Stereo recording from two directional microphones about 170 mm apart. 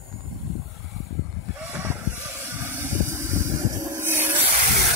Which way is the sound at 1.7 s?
10° right (ahead or behind).